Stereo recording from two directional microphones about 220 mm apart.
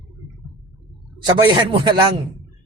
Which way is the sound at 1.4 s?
20° right (ahead or behind).